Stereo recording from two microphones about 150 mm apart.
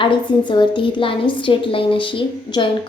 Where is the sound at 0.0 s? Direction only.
30° left (ahead or behind).